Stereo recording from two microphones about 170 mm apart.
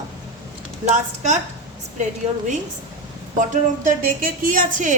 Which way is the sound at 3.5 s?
55° right (ahead or behind).